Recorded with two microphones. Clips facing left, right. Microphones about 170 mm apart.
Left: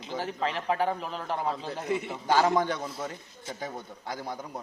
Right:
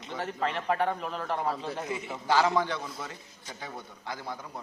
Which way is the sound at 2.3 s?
45° left (ahead or behind).